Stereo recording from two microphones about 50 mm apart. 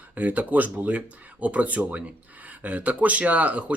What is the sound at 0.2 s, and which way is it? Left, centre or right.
Speech, right.